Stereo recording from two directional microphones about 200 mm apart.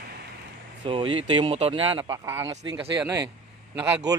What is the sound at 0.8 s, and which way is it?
Speech, 25° right (ahead or behind).